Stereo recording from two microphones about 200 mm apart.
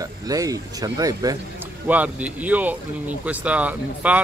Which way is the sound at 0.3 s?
15° right (ahead or behind).